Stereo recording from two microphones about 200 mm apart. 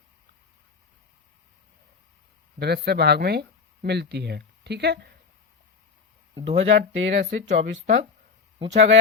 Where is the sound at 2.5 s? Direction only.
55° right (ahead or behind).